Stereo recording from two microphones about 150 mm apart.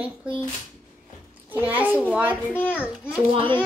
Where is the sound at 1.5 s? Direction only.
10° right (ahead or behind).